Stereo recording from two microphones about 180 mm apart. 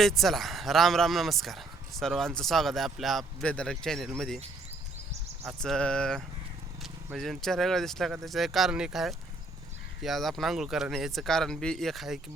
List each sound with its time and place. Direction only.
0.0 s speech: centre (ahead or behind)
5.6 s speech: 5° left (ahead or behind)